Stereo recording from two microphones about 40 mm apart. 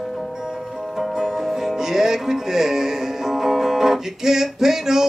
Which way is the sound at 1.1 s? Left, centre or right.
Centre.